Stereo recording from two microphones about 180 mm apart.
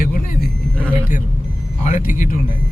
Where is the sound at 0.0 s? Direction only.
55° left (ahead or behind).